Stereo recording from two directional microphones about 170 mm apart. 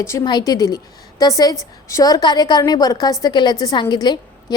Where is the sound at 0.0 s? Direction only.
20° left (ahead or behind).